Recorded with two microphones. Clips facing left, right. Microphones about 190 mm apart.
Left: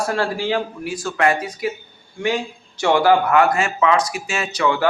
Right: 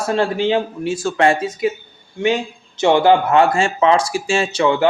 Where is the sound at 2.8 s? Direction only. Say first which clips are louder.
Right 3 dB; 20° right (ahead or behind).